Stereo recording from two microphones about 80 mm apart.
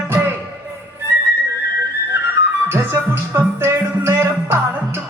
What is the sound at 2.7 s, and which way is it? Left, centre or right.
Music, right.